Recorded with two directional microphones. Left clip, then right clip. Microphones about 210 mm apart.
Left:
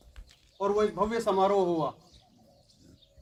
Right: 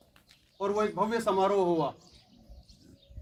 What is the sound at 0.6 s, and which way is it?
A man's voice, 15° right (ahead or behind).